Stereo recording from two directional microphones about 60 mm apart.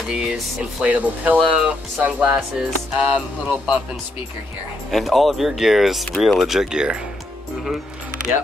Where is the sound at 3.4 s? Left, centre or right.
Centre.